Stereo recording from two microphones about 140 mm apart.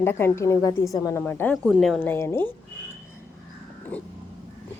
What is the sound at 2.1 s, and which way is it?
Speech, 15° left (ahead or behind).